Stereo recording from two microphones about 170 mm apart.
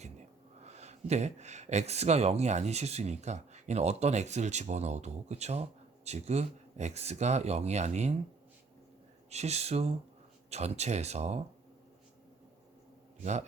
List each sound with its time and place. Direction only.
0.6 s speech: 40° right (ahead or behind)
9.3 s speech: 40° right (ahead or behind)